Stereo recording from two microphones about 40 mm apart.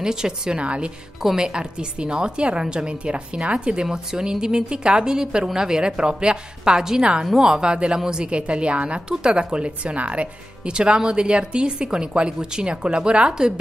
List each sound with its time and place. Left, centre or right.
0.0 s a woman's voice: centre
0.6 s a woman's voice: right
1.2 s a woman's voice: centre